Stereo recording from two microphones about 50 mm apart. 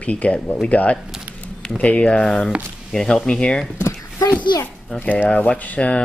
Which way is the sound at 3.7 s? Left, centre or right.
Left.